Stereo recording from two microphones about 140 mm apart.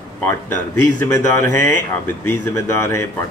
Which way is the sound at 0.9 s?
20° left (ahead or behind).